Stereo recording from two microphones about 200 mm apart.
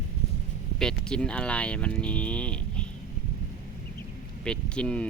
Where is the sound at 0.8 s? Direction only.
5° left (ahead or behind).